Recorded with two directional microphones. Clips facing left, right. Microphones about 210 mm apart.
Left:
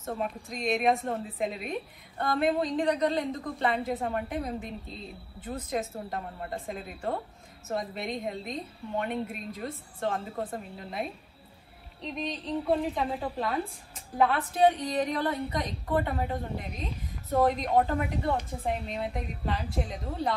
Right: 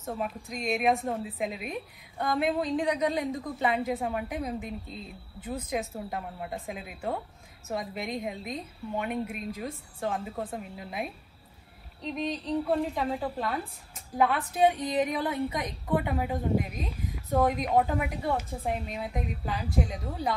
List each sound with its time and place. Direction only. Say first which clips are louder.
0.0 s a woman's voice: even; 5° right (ahead or behind)